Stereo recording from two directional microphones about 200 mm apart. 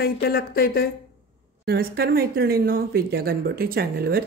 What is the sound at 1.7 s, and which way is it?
Speech, 50° right (ahead or behind).